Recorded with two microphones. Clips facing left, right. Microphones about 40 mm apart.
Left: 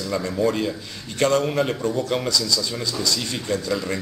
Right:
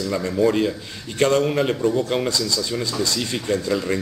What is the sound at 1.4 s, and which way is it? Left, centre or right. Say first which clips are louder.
Speech: right 2 dB; centre.